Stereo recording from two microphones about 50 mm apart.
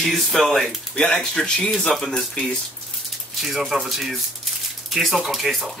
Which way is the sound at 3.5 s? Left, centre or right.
Centre.